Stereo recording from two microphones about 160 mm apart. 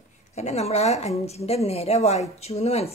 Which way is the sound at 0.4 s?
40° left (ahead or behind).